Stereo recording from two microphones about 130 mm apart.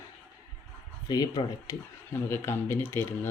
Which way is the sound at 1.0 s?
30° left (ahead or behind).